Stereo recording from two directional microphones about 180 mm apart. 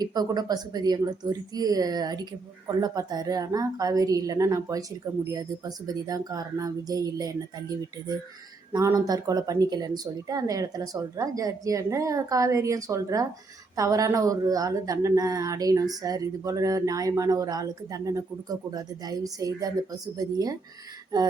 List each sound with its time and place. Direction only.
0.0 s speech: 20° right (ahead or behind)
8.7 s speech: 20° right (ahead or behind)